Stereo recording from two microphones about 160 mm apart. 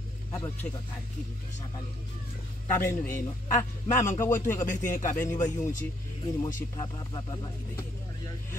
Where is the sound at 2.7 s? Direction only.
15° left (ahead or behind).